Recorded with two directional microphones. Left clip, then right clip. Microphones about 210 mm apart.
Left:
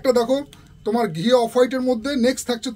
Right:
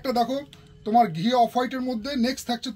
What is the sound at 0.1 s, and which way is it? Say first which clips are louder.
Speech: left 6 dB; 30° left (ahead or behind).